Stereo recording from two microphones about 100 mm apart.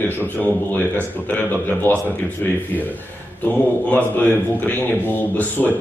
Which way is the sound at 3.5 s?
15° left (ahead or behind).